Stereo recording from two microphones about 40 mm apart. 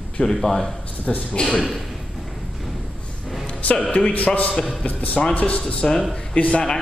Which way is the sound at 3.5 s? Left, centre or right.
Left.